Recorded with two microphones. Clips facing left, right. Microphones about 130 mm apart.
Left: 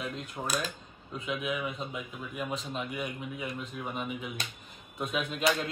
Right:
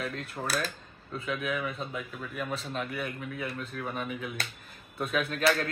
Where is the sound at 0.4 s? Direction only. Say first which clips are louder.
Right 1 dB; 5° left (ahead or behind).